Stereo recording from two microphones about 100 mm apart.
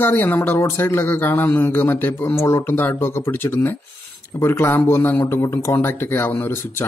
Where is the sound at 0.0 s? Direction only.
20° left (ahead or behind).